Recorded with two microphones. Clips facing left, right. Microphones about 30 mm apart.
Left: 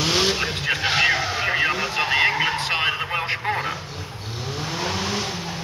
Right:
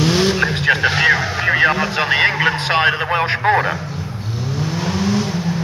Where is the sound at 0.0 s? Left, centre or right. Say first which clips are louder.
Right 5 dB; centre.